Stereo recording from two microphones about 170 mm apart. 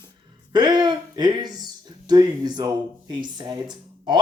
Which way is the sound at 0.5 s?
25° right (ahead or behind).